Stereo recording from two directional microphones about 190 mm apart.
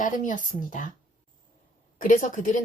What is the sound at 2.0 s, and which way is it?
Speech, 45° left (ahead or behind).